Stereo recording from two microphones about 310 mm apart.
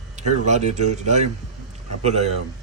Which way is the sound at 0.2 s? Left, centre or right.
Right.